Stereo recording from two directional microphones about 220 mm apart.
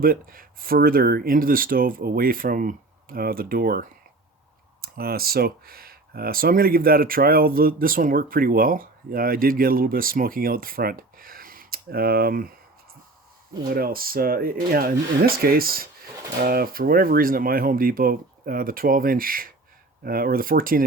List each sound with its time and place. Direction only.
0.0 s speech: 40° right (ahead or behind)
13.7 s speech: 40° right (ahead or behind)